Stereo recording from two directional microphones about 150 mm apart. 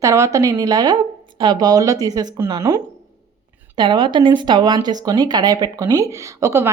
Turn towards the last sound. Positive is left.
turn(degrees=-20)  # may be behind; listen again after turning